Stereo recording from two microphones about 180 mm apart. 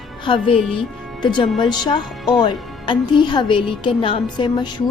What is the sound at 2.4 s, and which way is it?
A woman's voice, 25° left (ahead or behind).